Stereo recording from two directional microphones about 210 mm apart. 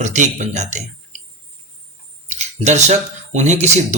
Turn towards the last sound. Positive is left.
turn(degrees=-35)  # may be behind; listen again after turning